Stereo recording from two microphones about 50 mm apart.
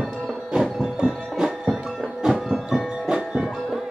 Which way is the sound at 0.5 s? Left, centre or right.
Centre.